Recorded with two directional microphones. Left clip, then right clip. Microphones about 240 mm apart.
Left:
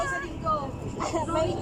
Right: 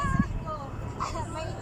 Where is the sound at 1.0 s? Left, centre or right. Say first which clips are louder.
Left 7 dB; left.